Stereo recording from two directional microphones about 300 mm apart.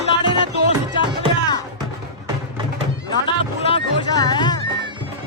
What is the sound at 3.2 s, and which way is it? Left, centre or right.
Music, centre.